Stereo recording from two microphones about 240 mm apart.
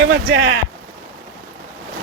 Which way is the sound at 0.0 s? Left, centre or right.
Right.